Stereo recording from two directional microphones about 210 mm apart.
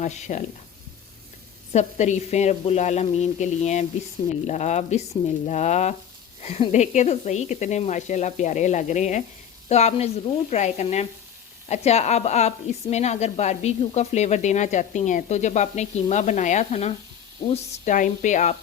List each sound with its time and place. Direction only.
0.0 s a woman's voice: 35° left (ahead or behind)
1.7 s a woman's voice: 35° left (ahead or behind)